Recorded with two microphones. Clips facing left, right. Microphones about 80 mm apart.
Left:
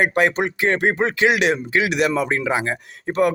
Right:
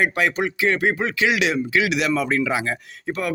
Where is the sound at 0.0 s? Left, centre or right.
Left.